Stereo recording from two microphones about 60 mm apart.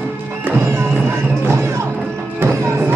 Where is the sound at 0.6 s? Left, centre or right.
Right.